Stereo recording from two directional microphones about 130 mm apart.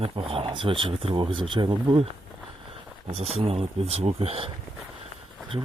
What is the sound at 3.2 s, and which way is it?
Speech, 50° right (ahead or behind).